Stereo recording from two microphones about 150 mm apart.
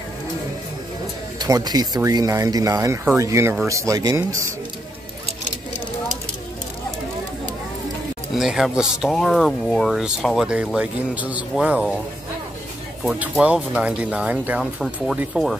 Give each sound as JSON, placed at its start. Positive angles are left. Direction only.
{"t": 1.4, "sound": "speech", "side_deg": -25}
{"t": 8.4, "sound": "speech", "side_deg": 0}
{"t": 13.0, "sound": "speech", "side_deg": -5}